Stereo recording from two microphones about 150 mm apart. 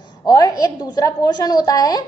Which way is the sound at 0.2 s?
25° left (ahead or behind).